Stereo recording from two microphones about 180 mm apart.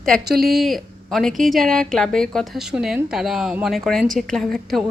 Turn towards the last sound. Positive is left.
turn(degrees=0)  # may be behind; listen again after turning